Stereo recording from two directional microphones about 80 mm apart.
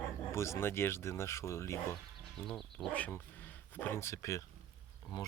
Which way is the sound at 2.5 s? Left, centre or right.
Centre.